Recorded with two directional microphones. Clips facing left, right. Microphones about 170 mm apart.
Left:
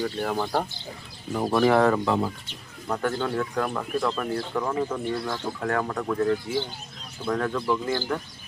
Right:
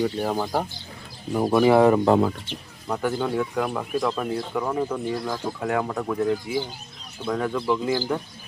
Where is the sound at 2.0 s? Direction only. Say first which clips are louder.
Right 6 dB; 55° right (ahead or behind).